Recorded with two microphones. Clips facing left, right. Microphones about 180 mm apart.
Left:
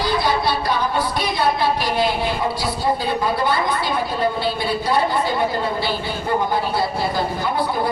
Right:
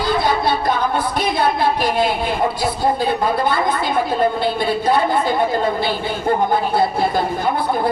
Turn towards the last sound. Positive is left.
turn(degrees=-55)  # may be behind; listen again after turning